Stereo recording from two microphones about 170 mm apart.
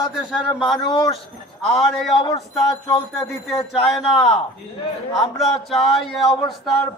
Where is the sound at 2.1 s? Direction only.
25° left (ahead or behind).